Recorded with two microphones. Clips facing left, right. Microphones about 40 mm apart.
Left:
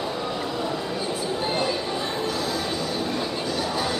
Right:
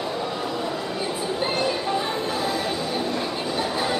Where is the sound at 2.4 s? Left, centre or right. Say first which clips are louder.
Right 2 dB; right.